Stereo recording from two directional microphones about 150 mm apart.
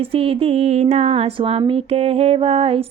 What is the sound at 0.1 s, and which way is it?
Mantra, 40° right (ahead or behind).